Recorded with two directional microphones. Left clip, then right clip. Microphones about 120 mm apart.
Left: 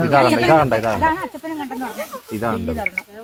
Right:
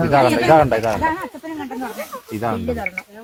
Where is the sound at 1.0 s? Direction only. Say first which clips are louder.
Left 2 dB; 15° left (ahead or behind).